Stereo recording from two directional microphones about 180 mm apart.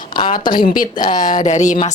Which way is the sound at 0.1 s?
25° left (ahead or behind).